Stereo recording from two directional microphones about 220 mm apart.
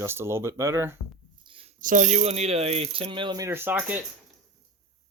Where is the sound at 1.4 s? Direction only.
25° right (ahead or behind).